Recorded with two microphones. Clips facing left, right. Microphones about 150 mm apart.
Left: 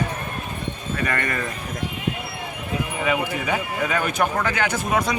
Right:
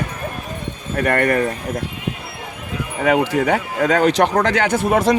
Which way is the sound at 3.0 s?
75° right (ahead or behind).